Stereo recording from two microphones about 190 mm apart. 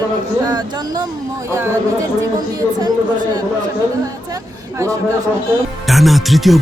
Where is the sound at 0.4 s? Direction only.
20° right (ahead or behind).